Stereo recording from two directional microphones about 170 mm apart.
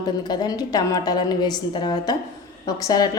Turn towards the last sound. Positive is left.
turn(degrees=20)  # may be behind; listen again after turning